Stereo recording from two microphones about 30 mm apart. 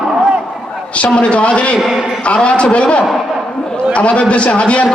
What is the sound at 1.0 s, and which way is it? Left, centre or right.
A man's voice, left.